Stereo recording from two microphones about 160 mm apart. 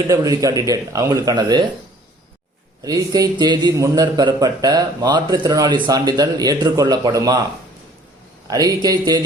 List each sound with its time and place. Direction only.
0.1 s a man's voice: 20° right (ahead or behind)
2.8 s a man's voice: 25° right (ahead or behind)
8.4 s a man's voice: 25° right (ahead or behind)